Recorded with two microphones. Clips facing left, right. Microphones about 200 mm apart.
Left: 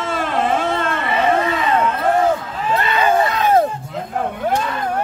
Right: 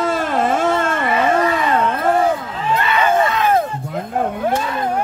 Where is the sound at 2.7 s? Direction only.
35° left (ahead or behind).